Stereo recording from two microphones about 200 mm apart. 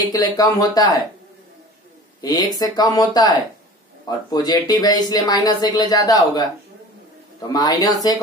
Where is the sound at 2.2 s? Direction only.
20° left (ahead or behind).